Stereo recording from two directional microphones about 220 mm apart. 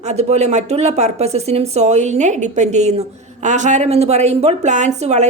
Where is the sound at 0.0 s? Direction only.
30° right (ahead or behind).